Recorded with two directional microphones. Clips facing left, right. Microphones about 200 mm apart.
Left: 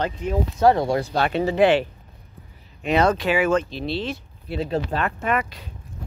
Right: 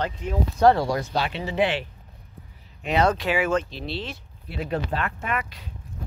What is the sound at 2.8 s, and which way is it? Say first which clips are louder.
Speech: left 3 dB; 55° left (ahead or behind).